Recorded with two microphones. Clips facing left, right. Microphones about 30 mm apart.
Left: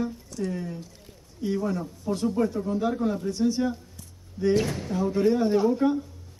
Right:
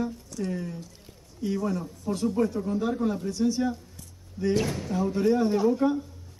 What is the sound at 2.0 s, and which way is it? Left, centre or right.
Speech, centre.